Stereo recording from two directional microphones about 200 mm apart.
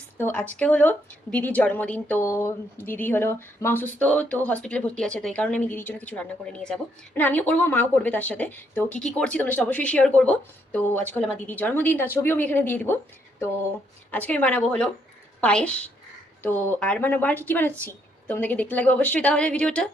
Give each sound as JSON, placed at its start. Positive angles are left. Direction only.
{"t": 0.2, "sound": "speech", "side_deg": 10}
{"t": 14.1, "sound": "a woman's voice", "side_deg": 10}